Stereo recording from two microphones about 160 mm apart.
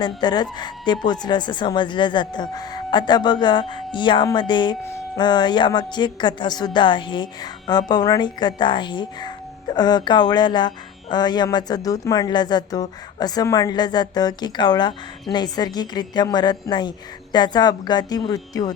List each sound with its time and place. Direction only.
0.0 s a woman's voice: 25° left (ahead or behind)